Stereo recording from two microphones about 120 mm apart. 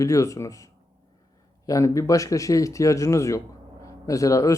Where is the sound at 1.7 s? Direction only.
25° left (ahead or behind).